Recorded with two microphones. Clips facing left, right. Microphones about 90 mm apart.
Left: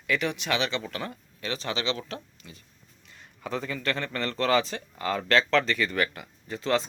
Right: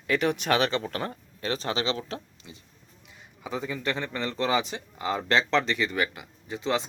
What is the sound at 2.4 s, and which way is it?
A man's voice, 20° right (ahead or behind).